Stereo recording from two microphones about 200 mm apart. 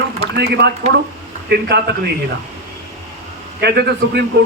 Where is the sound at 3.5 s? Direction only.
55° right (ahead or behind).